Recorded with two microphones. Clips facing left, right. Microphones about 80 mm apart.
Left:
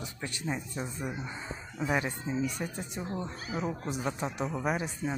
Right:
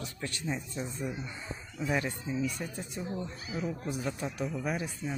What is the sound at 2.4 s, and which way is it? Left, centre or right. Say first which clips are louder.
Speech: left 1 dB; left.